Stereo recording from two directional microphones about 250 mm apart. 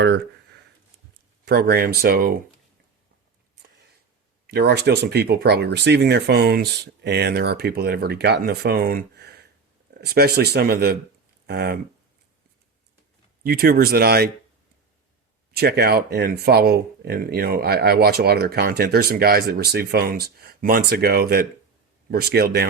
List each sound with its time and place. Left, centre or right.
1.5 s speech: right
4.5 s speech: right
13.4 s speech: right
15.5 s speech: right